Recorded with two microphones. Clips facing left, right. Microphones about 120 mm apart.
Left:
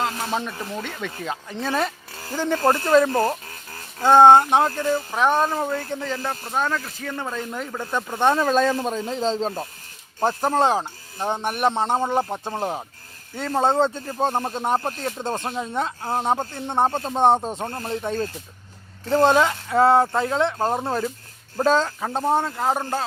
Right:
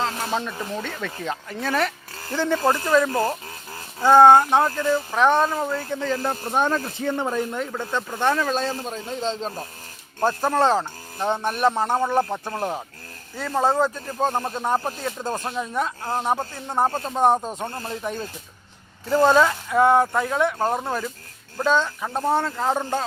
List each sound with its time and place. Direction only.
0.0 s a sound: centre (ahead or behind)
0.8 s speech: 10° left (ahead or behind)
2.6 s speech: 25° left (ahead or behind)
5.1 s speech: 10° left (ahead or behind)
5.5 s speech: 25° left (ahead or behind)
6.4 s speech: 20° right (ahead or behind)
7.5 s speech: centre (ahead or behind)
8.4 s speech: 45° left (ahead or behind)
9.2 s speech: 35° left (ahead or behind)
10.2 s speech: 20° left (ahead or behind)
19.3 s speech: 20° left (ahead or behind)
21.6 s speech: 40° left (ahead or behind)
22.2 s speech: 15° left (ahead or behind)